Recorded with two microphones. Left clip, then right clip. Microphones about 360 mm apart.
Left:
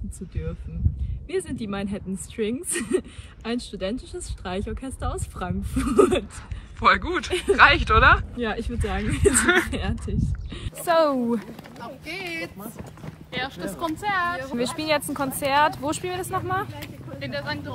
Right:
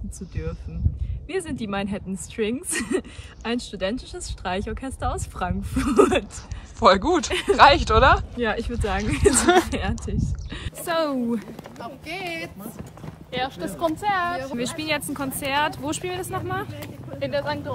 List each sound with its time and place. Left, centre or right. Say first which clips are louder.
1.3 s speech: right 1 dB; centre
13.3 s speech: right 2 dB; centre
14.5 s speech: left 2 dB; centre
17.2 s speech: right 5 dB; right